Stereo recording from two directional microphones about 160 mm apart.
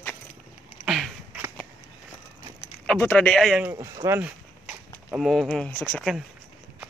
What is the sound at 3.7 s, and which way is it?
Speech, 20° right (ahead or behind).